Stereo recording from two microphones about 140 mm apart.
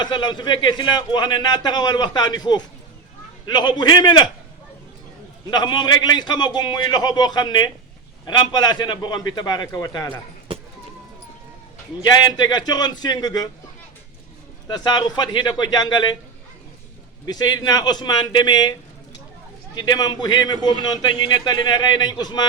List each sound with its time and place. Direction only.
0.0 s a man's voice: 35° left (ahead or behind)
5.5 s a man's voice: 30° left (ahead or behind)
12.0 s a man's voice: 30° left (ahead or behind)
14.7 s a man's voice: 30° left (ahead or behind)
17.2 s a man's voice: 30° left (ahead or behind)